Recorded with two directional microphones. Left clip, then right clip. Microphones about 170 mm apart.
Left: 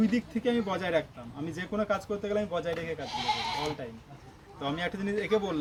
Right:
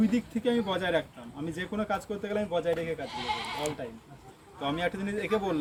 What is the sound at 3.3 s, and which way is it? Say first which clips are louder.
Speech: left 3 dB; 60° left (ahead or behind).